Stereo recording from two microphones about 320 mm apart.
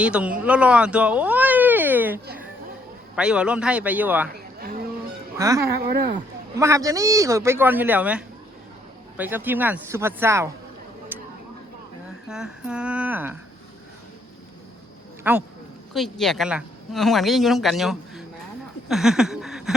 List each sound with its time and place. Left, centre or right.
0.0 s speech: centre
4.6 s a sound: right
5.4 s speech: centre
5.7 s speech: right
6.1 s a man's voice: centre
11.1 s a sound: centre
12.3 s speech: centre
15.2 s speech: centre
18.9 s a sound: centre